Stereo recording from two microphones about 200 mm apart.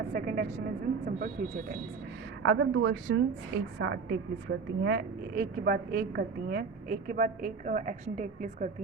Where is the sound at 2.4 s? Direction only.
70° right (ahead or behind).